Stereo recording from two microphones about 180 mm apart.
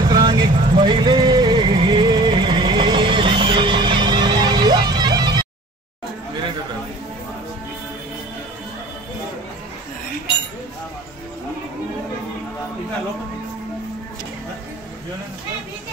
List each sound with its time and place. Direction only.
0.0 s music: 25° right (ahead or behind)